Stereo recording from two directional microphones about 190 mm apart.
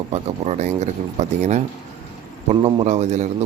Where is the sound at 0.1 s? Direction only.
35° right (ahead or behind).